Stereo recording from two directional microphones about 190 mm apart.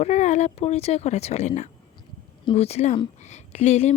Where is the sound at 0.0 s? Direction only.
35° left (ahead or behind).